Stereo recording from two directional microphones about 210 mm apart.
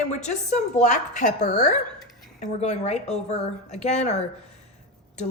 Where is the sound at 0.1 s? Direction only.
35° left (ahead or behind).